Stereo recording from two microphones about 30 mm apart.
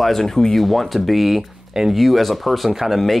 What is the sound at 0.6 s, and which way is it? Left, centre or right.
Speech, centre.